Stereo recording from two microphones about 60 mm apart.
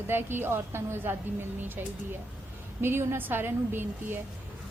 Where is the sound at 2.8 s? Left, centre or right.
Right.